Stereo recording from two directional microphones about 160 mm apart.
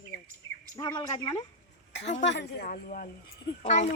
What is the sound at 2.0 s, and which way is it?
A woman's voice, 90° left.